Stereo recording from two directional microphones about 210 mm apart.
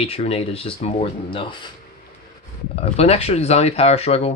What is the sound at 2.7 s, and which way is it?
Speech, 30° left (ahead or behind).